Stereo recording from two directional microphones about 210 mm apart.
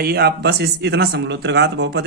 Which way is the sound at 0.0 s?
50° right (ahead or behind).